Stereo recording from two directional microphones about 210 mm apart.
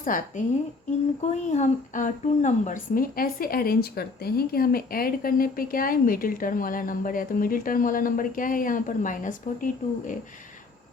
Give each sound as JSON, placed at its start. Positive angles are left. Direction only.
{"t": 0.0, "sound": "a woman's voice", "side_deg": 40}